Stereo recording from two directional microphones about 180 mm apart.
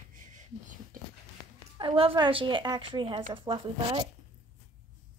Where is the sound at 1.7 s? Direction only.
30° right (ahead or behind).